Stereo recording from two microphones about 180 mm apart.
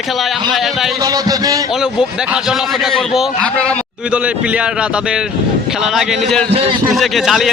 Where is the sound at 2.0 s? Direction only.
5° right (ahead or behind).